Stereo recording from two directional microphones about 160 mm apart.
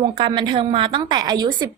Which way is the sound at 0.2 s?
30° right (ahead or behind).